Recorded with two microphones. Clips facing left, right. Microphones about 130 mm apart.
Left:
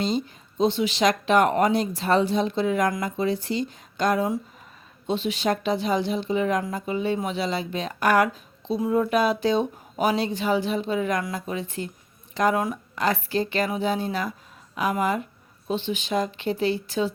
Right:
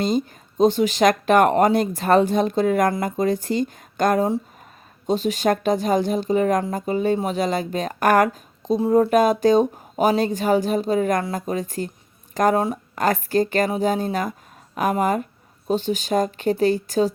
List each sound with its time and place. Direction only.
0.0 s speech: 45° right (ahead or behind)
12.5 s speech: 30° right (ahead or behind)
13.0 s speech: 45° right (ahead or behind)